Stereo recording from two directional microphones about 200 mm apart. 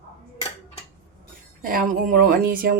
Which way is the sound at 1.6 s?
45° right (ahead or behind).